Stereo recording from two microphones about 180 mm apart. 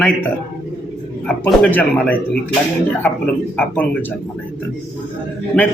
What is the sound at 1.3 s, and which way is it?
Speech, 10° left (ahead or behind).